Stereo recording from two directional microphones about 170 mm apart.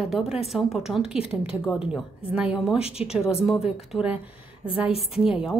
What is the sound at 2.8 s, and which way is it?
Speech, 35° left (ahead or behind).